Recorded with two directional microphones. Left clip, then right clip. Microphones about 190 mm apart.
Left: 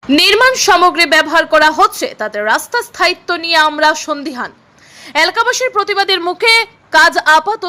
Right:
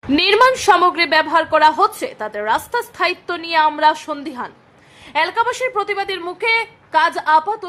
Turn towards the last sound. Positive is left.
turn(degrees=20)  # may be behind; listen again after turning